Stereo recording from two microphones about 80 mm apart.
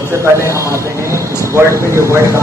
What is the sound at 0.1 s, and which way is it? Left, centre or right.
Speech, right.